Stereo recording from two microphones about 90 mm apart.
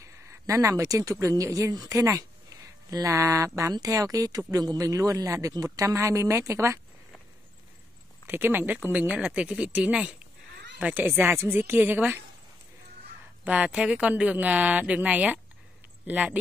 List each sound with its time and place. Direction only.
0.0 s a woman's voice: 35° right (ahead or behind)
8.3 s a woman's voice: 25° right (ahead or behind)
13.4 s speech: 15° right (ahead or behind)